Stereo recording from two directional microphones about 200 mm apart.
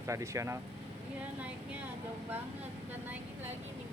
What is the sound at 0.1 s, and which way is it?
Speech, 15° right (ahead or behind).